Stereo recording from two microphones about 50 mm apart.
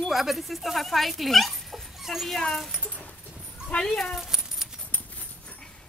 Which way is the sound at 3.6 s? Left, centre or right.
Centre.